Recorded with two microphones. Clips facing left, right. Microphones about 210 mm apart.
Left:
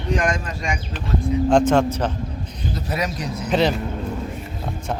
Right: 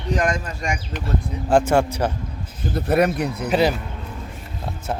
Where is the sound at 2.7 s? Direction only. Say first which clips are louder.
Right 8 dB; 60° right (ahead or behind).